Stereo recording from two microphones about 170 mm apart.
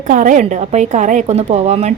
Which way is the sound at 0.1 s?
50° right (ahead or behind).